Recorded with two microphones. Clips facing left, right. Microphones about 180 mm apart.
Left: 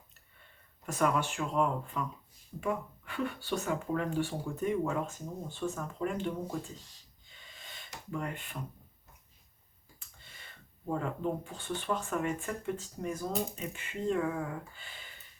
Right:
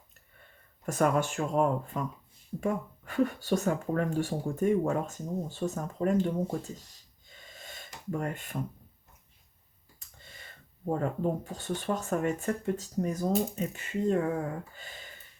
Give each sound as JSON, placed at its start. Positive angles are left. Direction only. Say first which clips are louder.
{"t": 0.9, "sound": "speech", "louder": "right 3 dB", "side_deg": -45}
{"t": 7.3, "sound": "a sound", "louder": "right 5 dB", "side_deg": -45}
{"t": 10.8, "sound": "speech", "louder": "right 4 dB", "side_deg": -45}